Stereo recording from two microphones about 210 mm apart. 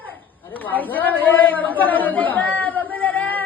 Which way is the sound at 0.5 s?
10° left (ahead or behind).